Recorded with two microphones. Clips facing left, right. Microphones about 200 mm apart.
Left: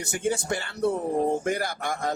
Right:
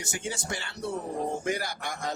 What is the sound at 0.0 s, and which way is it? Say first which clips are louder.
A man's voice: left 8 dB; 55° left (ahead or behind).